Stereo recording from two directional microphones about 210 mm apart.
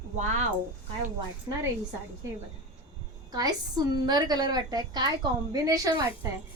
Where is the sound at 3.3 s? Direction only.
20° right (ahead or behind).